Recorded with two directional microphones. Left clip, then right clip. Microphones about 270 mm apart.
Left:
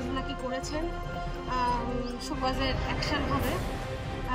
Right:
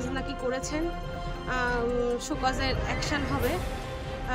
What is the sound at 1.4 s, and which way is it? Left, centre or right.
Music, centre.